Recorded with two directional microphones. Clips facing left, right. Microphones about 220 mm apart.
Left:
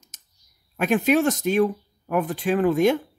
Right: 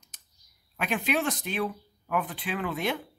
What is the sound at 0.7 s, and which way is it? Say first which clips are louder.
Speech: left 9 dB; 45° left (ahead or behind).